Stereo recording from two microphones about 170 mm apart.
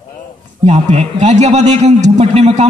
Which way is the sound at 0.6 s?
40° right (ahead or behind).